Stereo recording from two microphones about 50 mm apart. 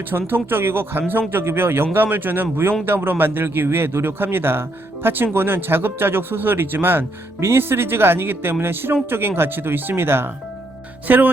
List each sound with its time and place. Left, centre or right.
0.1 s speech: right
11.1 s speech: right